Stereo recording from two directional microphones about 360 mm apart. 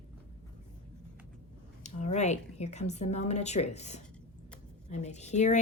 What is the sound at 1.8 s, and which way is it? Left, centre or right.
A woman's voice, centre.